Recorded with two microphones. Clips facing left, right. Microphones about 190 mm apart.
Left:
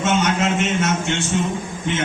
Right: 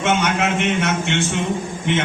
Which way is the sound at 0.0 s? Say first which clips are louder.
Even; 60° right (ahead or behind).